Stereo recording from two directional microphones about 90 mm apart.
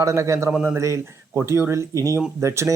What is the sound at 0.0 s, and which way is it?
Speech, 35° right (ahead or behind).